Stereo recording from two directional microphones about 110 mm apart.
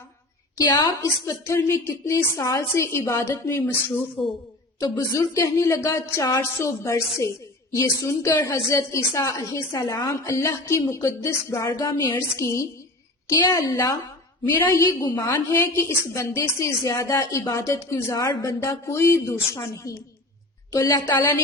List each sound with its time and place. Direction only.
0.5 s a woman's voice: 35° left (ahead or behind); by 3.9 s 20° left (ahead or behind)
4.2 s a woman's voice: centre (ahead or behind)
5.1 s a woman's voice: 25° left (ahead or behind)